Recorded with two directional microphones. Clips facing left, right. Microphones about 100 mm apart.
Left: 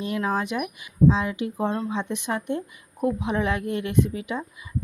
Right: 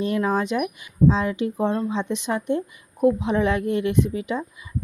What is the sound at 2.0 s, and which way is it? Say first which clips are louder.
A woman's voice: right 3 dB; 20° right (ahead or behind).